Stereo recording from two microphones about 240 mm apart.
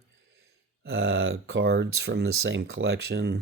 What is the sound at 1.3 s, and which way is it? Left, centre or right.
Speech, right.